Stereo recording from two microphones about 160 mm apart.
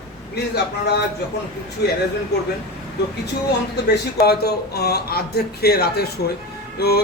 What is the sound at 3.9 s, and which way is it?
A man's voice, 80° left.